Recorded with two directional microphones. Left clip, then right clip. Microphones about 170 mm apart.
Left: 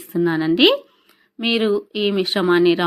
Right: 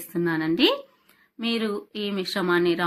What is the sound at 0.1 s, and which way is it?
Speech, 30° left (ahead or behind).